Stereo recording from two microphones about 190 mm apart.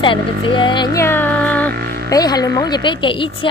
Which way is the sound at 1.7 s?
55° right (ahead or behind).